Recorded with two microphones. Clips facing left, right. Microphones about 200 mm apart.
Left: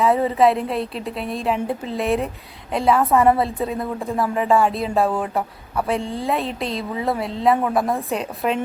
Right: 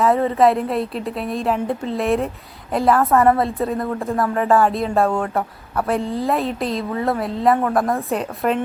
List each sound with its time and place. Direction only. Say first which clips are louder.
0.0 s a woman's voice: right 1 dB; centre (ahead or behind)